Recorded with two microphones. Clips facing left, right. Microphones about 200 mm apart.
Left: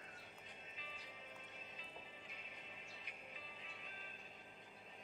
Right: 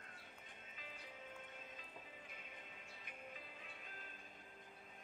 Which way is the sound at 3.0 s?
50° right (ahead or behind).